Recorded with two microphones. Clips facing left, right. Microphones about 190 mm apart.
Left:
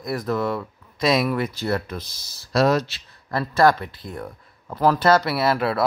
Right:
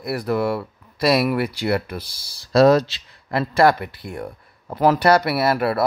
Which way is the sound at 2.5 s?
35° right (ahead or behind).